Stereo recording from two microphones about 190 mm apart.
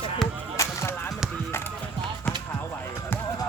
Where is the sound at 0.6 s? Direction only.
15° left (ahead or behind).